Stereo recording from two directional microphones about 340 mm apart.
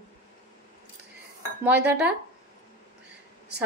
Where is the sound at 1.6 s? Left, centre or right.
Centre.